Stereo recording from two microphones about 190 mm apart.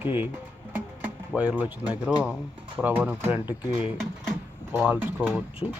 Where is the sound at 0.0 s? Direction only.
10° right (ahead or behind).